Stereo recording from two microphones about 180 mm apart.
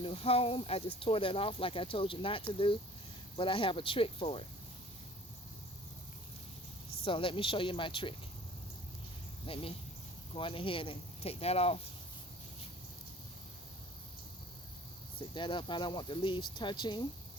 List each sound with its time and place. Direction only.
0.0 s speech: 30° left (ahead or behind)
7.0 s speech: 30° left (ahead or behind)
9.5 s speech: 30° left (ahead or behind)
15.4 s speech: 25° left (ahead or behind)